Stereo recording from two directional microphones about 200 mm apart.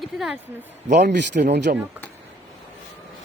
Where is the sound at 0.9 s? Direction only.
55° right (ahead or behind).